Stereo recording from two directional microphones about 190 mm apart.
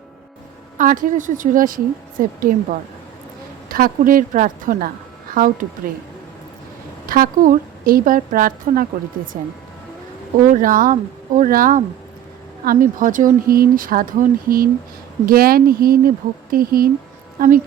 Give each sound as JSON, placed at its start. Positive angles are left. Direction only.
{"t": 0.8, "sound": "a woman's voice", "side_deg": -45}
{"t": 3.7, "sound": "a woman's voice", "side_deg": -50}
{"t": 7.1, "sound": "a woman's voice", "side_deg": -45}
{"t": 10.4, "sound": "a woman's voice", "side_deg": -45}